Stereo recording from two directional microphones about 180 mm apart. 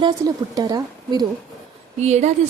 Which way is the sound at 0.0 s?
20° right (ahead or behind).